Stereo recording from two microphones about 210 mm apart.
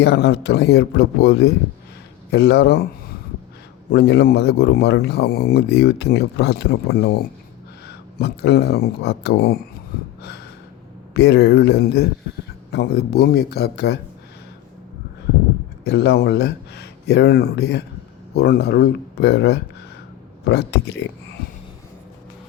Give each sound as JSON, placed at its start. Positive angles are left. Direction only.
{"t": 0.0, "sound": "speech", "side_deg": 50}
{"t": 11.1, "sound": "speech", "side_deg": 50}
{"t": 15.8, "sound": "speech", "side_deg": 50}